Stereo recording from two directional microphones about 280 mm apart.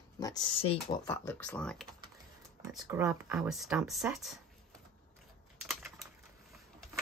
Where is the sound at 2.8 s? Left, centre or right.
Centre.